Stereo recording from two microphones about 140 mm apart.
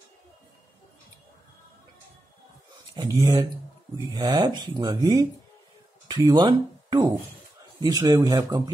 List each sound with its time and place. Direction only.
2.9 s speech: 25° right (ahead or behind)